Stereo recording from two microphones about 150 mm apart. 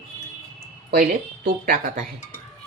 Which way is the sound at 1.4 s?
80° right.